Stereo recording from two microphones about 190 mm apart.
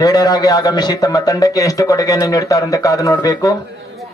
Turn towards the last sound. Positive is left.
turn(degrees=20)  # may be behind; listen again after turning